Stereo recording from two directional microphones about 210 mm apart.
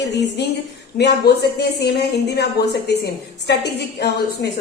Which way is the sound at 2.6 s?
50° left (ahead or behind).